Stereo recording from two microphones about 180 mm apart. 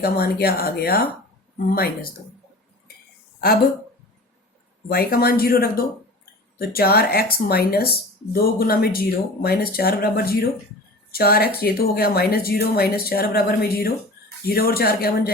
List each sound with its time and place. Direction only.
0.0 s speech: 60° left (ahead or behind)
4.9 s speech: 55° left (ahead or behind)